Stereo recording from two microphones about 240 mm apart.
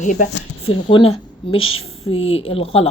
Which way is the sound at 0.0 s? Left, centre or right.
Left.